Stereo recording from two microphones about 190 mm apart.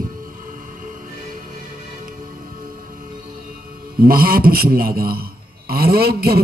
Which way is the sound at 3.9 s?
50° right (ahead or behind).